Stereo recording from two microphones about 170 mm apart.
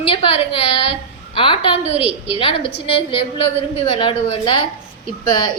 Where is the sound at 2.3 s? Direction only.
30° left (ahead or behind).